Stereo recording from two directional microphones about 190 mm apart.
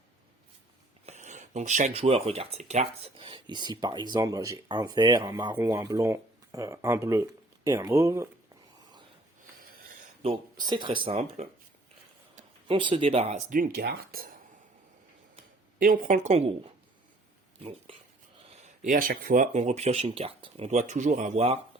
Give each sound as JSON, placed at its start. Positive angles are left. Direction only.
{"t": 1.0, "sound": "speech", "side_deg": -40}
{"t": 9.6, "sound": "wheeze", "side_deg": -45}
{"t": 10.2, "sound": "speech", "side_deg": -25}
{"t": 15.8, "sound": "speech", "side_deg": -45}
{"t": 18.9, "sound": "speech", "side_deg": -45}